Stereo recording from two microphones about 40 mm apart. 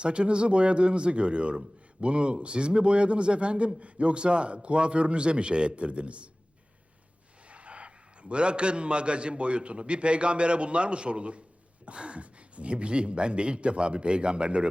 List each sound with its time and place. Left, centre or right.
0.0 s a man's voice: right
7.5 s a man's voice: right